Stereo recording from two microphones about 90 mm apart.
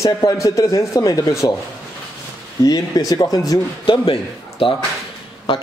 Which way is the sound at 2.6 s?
45° left (ahead or behind).